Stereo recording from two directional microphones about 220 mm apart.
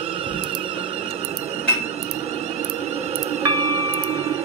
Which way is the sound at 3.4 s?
20° right (ahead or behind).